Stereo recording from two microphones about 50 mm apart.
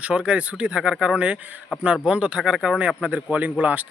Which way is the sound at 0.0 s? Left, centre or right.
Right.